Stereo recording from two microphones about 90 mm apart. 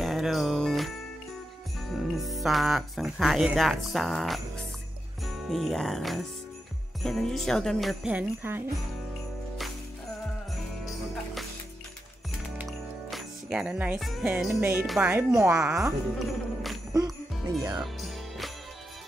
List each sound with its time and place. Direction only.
0.0 s jingle bell: centre (ahead or behind)
1.9 s speech: centre (ahead or behind)
3.5 s jingle bell: centre (ahead or behind)
5.2 s speech: centre (ahead or behind)
7.0 s jingle bell: 5° left (ahead or behind)
8.1 s speech: 20° right (ahead or behind)
12.6 s music: 5° right (ahead or behind)
13.9 s jingle bell: centre (ahead or behind)
14.2 s music: 5° right (ahead or behind)
14.6 s speech: 20° right (ahead or behind)
15.7 s jingle bell: centre (ahead or behind)
16.9 s music: 40° right (ahead or behind)